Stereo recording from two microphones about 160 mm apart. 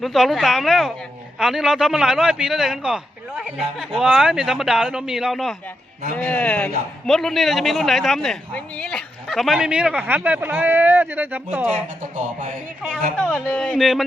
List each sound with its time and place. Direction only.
0.0 s speech: centre (ahead or behind)
13.1 s speech: centre (ahead or behind)